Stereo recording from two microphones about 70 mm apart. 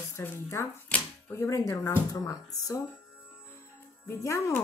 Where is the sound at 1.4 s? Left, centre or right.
Left.